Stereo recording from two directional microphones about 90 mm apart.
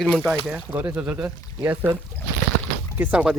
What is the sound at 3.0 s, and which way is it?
Speech, 20° right (ahead or behind).